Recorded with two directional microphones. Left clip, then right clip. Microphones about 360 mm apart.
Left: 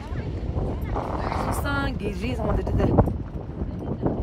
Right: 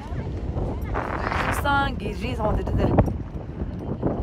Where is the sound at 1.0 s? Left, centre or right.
Centre.